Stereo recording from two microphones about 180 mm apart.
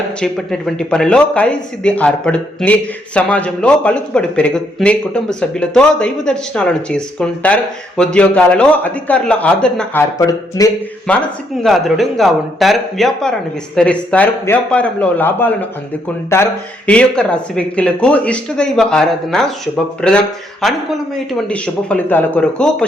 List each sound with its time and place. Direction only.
0.2 s speech: centre (ahead or behind)
10.2 s speech: 20° left (ahead or behind)
11.1 s speech: 5° left (ahead or behind)